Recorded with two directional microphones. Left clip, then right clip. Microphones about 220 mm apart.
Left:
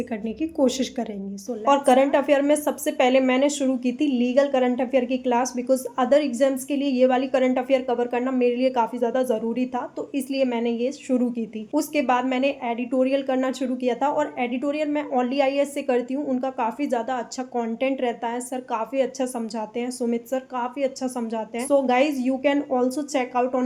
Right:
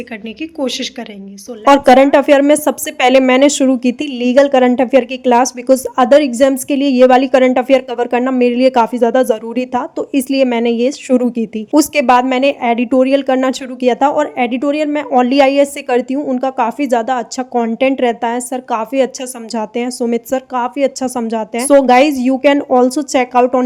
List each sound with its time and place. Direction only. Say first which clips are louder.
0.6 s a woman's voice: right 3 dB; 10° left (ahead or behind)
1.6 s a woman's voice: right 11 dB; 45° right (ahead or behind)